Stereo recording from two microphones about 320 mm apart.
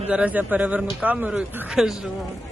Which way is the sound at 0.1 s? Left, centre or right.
Centre.